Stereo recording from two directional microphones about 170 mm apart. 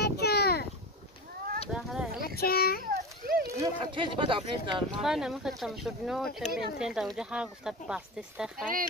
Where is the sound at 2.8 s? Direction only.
60° right (ahead or behind).